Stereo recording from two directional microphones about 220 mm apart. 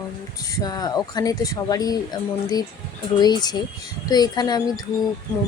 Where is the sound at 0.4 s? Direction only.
15° left (ahead or behind).